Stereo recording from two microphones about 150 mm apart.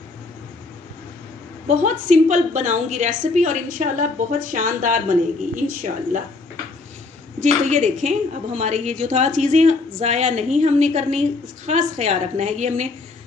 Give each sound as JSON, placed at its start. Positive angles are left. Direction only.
{"t": 1.7, "sound": "a woman's voice", "side_deg": -55}
{"t": 7.3, "sound": "a woman's voice", "side_deg": -55}